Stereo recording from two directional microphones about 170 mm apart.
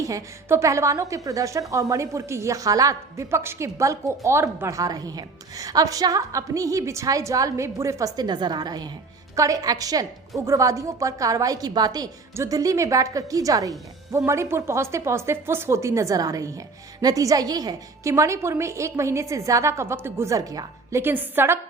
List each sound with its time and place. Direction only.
0.0 s a woman's voice: 20° right (ahead or behind)